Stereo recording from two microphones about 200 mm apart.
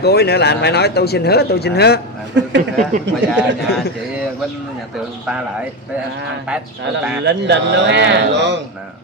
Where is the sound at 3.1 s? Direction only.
60° right (ahead or behind).